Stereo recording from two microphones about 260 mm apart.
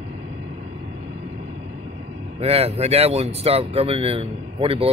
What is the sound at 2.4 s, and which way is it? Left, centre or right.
Speech, right.